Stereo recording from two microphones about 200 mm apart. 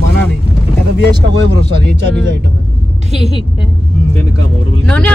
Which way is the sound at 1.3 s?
60° right (ahead or behind).